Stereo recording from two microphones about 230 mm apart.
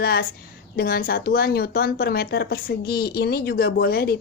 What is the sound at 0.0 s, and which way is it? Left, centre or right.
A woman's voice, left.